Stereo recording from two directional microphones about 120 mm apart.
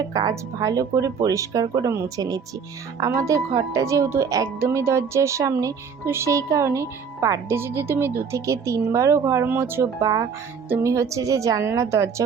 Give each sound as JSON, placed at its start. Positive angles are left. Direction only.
{"t": 0.0, "sound": "speech", "side_deg": -30}